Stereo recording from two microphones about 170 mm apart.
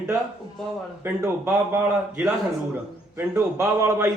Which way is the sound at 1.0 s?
10° right (ahead or behind).